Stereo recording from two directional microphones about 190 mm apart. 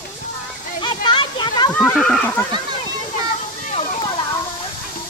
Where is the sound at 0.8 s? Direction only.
25° left (ahead or behind).